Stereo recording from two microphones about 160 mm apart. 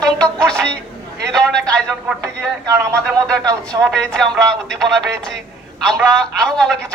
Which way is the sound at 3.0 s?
5° left (ahead or behind).